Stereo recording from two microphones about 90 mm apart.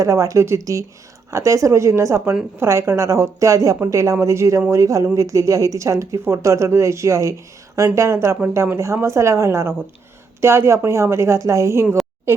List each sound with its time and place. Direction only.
0.0 s a woman's voice: 35° right (ahead or behind)